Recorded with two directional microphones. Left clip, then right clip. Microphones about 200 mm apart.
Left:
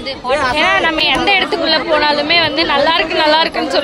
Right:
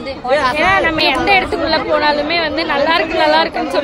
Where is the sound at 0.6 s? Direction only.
Centre (ahead or behind).